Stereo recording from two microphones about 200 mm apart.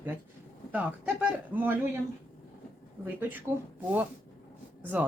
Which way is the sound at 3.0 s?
10° right (ahead or behind).